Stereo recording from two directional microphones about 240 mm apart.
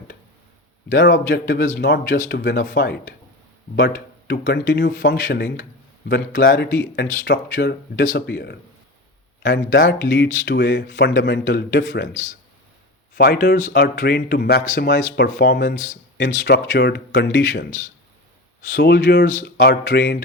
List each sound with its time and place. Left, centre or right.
0.9 s speech: left
13.1 s speech: left
16.2 s speech: left